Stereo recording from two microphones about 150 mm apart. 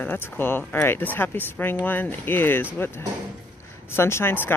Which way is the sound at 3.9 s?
15° left (ahead or behind).